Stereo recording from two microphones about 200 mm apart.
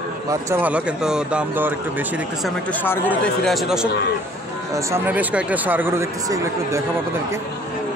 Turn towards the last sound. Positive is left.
turn(degrees=-15)  # may be behind; listen again after turning